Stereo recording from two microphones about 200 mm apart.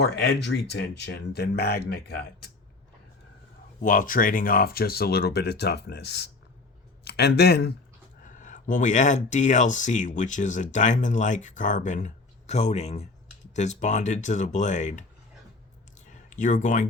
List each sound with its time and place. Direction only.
0.0 s speech: 55° left (ahead or behind)
3.8 s speech: 45° left (ahead or behind)
8.2 s speech: 40° left (ahead or behind)
16.3 s speech: 40° left (ahead or behind)